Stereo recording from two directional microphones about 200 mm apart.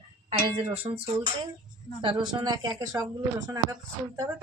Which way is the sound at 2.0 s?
25° right (ahead or behind).